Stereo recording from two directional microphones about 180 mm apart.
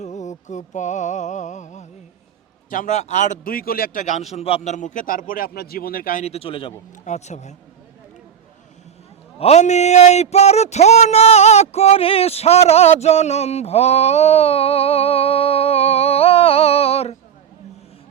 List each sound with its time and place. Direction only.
0.0 s music: 40° left (ahead or behind)
2.6 s a man's voice: 45° left (ahead or behind)
6.2 s a man's voice: 35° left (ahead or behind)
7.0 s a man's voice: 40° left (ahead or behind)
9.4 s speech: 40° left (ahead or behind)